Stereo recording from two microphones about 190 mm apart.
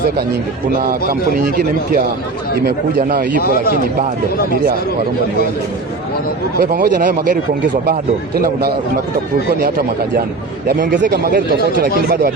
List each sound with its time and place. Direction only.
2.6 s speech: 45° right (ahead or behind)
6.6 s speech: 50° right (ahead or behind)
9.6 s speech: 50° right (ahead or behind)